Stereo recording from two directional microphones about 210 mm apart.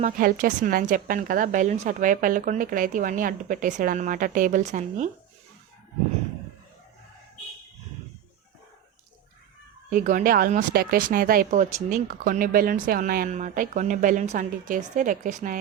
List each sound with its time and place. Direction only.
0.0 s speech: 40° right (ahead or behind)
9.9 s speech: 40° right (ahead or behind)